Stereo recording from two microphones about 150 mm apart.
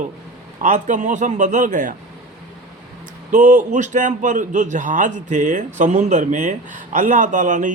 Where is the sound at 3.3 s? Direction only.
60° right (ahead or behind).